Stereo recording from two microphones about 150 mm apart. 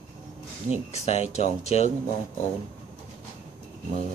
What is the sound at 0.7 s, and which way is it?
Speech, 45° left (ahead or behind).